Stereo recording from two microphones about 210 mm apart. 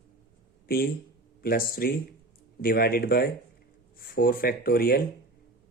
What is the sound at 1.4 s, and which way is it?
Speech, 45° left (ahead or behind).